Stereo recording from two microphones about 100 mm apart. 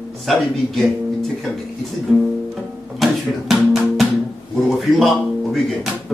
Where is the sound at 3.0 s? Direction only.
Centre (ahead or behind).